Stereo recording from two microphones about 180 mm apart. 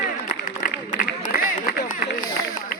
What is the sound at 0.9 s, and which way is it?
Run, 50° left (ahead or behind).